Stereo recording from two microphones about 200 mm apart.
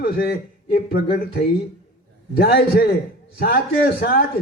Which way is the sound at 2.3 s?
50° left (ahead or behind).